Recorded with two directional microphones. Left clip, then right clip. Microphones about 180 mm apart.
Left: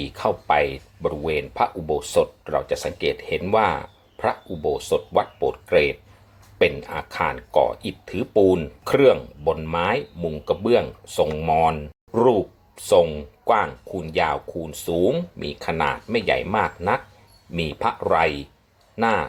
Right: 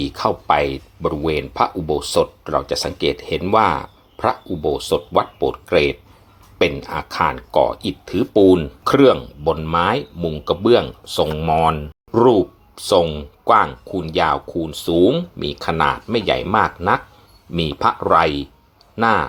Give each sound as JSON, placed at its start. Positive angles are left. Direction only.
{"t": 0.0, "sound": "speech", "side_deg": -35}